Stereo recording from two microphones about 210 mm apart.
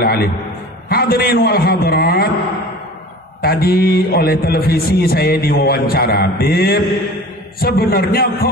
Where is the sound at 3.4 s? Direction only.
45° left (ahead or behind).